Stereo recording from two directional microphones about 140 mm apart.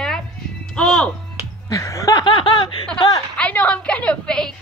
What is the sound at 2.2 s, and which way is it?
Laughter, 35° left (ahead or behind).